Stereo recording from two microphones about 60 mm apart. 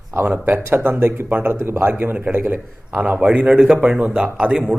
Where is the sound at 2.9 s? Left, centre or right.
Centre.